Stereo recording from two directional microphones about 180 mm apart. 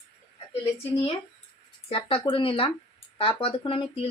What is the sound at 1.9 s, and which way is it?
Speech, 30° left (ahead or behind).